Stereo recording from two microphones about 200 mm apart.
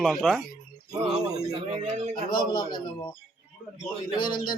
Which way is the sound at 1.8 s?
35° right (ahead or behind).